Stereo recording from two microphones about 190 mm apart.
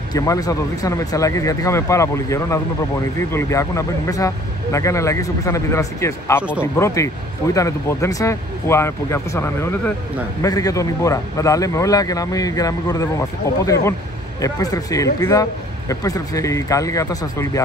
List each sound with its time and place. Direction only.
0.1 s a man's voice: 20° left (ahead or behind)